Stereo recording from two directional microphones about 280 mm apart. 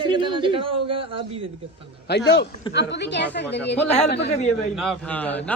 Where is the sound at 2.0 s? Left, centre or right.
Left.